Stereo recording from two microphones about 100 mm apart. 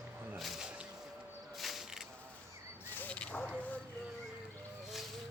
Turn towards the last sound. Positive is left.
turn(degrees=15)  # may be behind; listen again after turning